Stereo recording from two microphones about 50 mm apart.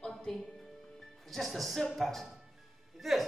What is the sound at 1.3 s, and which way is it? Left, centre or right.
Speech, centre.